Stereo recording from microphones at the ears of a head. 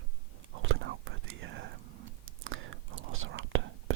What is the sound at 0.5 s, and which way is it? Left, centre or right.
Whispering, right.